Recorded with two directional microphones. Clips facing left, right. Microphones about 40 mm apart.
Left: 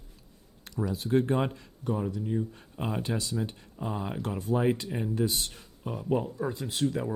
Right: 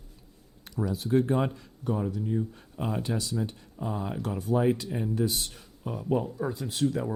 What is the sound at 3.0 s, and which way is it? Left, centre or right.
Speech, left.